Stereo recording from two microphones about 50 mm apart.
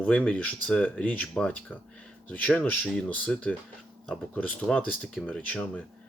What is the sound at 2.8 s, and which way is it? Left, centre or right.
Speech, centre.